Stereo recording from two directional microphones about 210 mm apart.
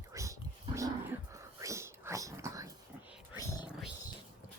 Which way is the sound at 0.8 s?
15° right (ahead or behind).